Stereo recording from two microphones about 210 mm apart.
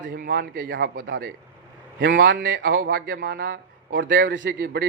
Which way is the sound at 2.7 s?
45° right (ahead or behind).